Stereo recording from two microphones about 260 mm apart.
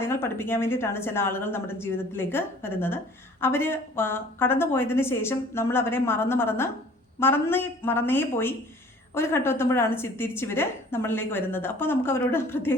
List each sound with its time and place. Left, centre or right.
0.0 s a woman's voice: centre